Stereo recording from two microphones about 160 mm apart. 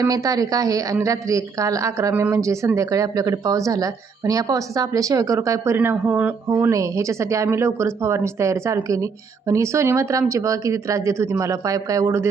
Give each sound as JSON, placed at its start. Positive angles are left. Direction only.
{"t": 0.0, "sound": "speech", "side_deg": -20}